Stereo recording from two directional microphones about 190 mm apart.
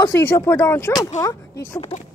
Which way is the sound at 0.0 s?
15° left (ahead or behind).